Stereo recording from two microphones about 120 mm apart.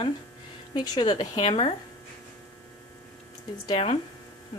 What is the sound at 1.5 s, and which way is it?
Speech, 55° left (ahead or behind).